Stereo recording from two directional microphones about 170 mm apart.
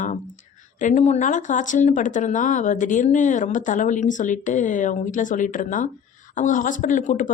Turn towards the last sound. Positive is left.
turn(degrees=50)  # may be behind; listen again after turning